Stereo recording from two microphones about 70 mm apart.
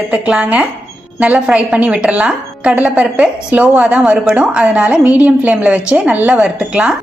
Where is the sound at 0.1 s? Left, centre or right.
Centre.